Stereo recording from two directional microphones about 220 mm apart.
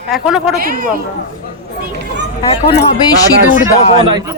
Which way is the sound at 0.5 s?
40° right (ahead or behind).